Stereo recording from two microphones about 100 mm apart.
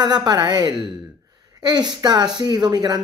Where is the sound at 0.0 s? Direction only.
45° right (ahead or behind).